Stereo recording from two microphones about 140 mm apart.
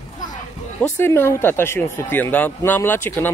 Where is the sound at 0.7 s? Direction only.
15° left (ahead or behind).